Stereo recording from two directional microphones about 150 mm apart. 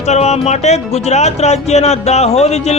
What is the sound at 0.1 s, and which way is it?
Speech, 45° left (ahead or behind).